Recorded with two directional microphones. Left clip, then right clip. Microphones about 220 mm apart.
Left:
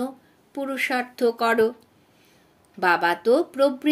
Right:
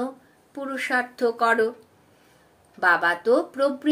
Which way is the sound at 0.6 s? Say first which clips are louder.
Even; 40° left (ahead or behind).